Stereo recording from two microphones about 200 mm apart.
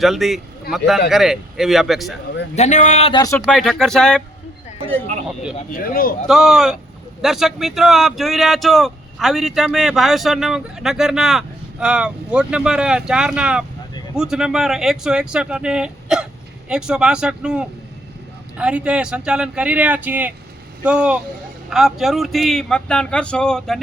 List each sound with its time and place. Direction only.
0.0 s speech: centre (ahead or behind)
2.6 s a man's voice: 35° left (ahead or behind)
3.2 s speech: 15° left (ahead or behind)
3.4 s speech: centre (ahead or behind)
5.7 s speech: 45° left (ahead or behind)
6.2 s speech: 5° right (ahead or behind)